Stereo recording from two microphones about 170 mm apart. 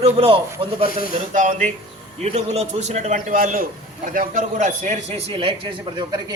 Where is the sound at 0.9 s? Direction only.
55° left (ahead or behind).